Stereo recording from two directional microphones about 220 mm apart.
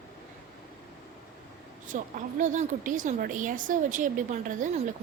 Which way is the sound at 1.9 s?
35° right (ahead or behind).